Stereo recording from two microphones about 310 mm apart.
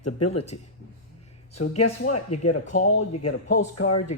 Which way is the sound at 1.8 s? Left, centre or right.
Left.